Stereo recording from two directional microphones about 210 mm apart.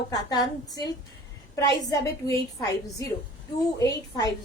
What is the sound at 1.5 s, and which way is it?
Speech, 15° left (ahead or behind).